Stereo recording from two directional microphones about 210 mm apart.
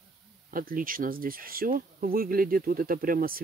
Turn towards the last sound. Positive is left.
turn(degrees=-45)  # may be behind; listen again after turning